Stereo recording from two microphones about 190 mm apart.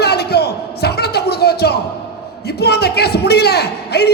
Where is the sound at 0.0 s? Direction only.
60° left (ahead or behind).